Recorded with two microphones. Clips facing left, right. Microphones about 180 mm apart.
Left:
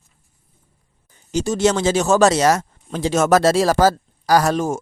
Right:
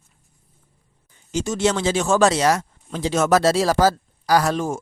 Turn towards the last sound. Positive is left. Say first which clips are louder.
# left 3 dB
turn(degrees=45)  # may be behind; listen again after turning